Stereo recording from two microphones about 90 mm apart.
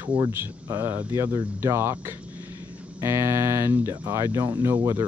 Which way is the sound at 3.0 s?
30° right (ahead or behind).